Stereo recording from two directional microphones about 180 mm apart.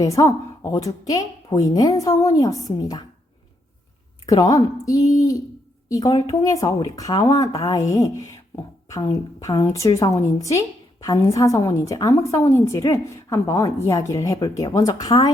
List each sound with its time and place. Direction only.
0.0 s a woman's voice: 15° left (ahead or behind)
4.3 s a woman's voice: 20° left (ahead or behind)